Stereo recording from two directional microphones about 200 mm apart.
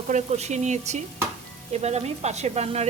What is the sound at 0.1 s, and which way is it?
A woman's voice, 35° right (ahead or behind).